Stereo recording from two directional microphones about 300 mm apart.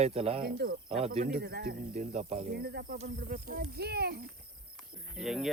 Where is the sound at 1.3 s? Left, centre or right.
Right.